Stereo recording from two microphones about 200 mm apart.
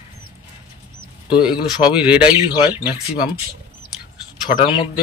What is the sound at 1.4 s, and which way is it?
Speech, 5° right (ahead or behind).